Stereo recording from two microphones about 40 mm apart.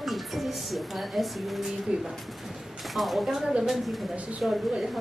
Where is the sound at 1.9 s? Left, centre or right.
Centre.